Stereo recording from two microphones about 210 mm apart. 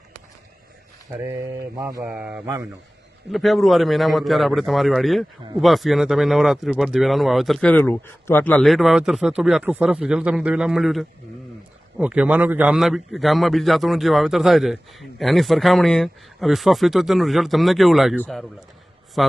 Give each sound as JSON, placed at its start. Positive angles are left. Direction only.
{"t": 1.1, "sound": "mantra", "side_deg": -15}
{"t": 2.0, "sound": "a man's voice", "side_deg": -5}